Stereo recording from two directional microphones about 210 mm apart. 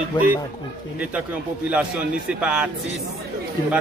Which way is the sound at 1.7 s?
5° right (ahead or behind).